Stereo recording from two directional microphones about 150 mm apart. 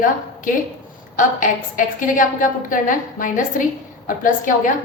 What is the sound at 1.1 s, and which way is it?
A woman's voice, 60° left (ahead or behind).